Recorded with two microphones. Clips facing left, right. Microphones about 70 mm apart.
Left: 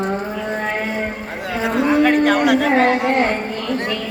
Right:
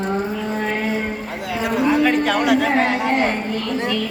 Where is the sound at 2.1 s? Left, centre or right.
Left.